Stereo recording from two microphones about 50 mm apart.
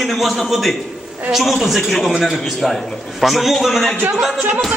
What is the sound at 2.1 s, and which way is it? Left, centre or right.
A woman's voice, centre.